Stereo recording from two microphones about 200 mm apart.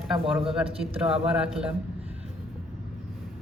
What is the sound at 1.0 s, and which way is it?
Speech, 5° right (ahead or behind).